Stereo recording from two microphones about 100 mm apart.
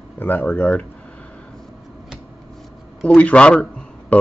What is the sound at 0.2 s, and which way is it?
Speech, 15° left (ahead or behind).